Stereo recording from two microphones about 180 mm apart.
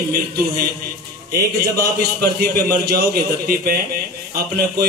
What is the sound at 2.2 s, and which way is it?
A man's voice, 60° right (ahead or behind).